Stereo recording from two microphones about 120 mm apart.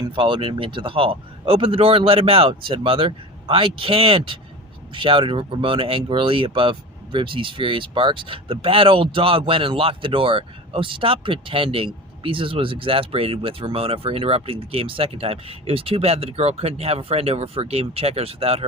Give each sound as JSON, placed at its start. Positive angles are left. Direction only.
{"t": 0.2, "sound": "speech", "side_deg": -45}